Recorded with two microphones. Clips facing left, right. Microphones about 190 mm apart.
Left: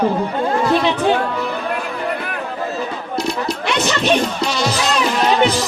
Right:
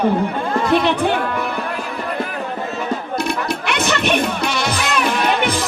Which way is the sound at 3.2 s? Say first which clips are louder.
Left 1 dB; 60° right (ahead or behind).